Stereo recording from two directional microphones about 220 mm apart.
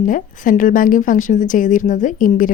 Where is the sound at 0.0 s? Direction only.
35° left (ahead or behind).